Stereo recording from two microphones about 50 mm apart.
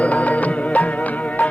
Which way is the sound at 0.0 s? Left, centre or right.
Left.